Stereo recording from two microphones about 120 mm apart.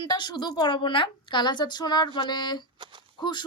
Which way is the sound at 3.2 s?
40° left (ahead or behind).